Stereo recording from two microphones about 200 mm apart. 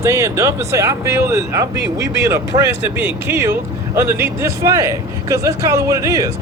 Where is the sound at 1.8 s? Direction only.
60° right (ahead or behind).